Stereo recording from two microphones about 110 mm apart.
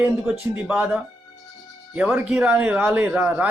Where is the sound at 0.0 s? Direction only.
15° right (ahead or behind).